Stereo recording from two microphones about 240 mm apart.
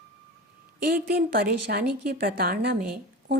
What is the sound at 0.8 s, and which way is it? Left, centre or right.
Speech, right.